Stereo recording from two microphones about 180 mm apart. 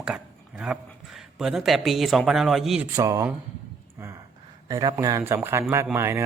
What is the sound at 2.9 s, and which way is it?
Speech, 15° right (ahead or behind).